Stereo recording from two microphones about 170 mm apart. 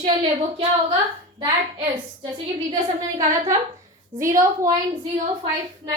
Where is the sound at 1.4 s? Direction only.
30° right (ahead or behind).